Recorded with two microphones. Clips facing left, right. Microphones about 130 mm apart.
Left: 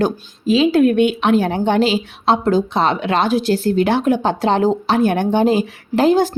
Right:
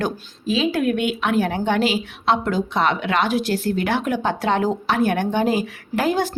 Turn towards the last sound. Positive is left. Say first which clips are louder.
# left 7 dB
turn(degrees=25)  # may be behind; listen again after turning